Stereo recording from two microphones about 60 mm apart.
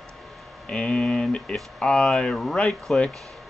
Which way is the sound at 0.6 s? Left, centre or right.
Centre.